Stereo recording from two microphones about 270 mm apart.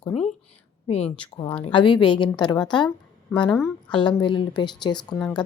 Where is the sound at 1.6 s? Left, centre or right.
Centre.